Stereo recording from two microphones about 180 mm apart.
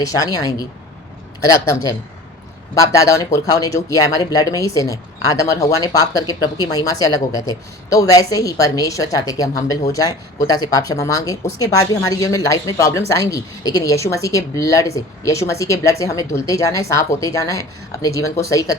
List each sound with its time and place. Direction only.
0.0 s a woman's voice: 20° left (ahead or behind)